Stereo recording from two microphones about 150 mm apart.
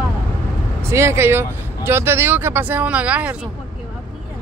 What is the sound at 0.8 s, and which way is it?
Speech, 15° right (ahead or behind).